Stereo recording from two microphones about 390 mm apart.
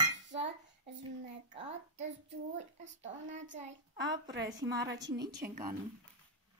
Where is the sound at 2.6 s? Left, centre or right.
Centre.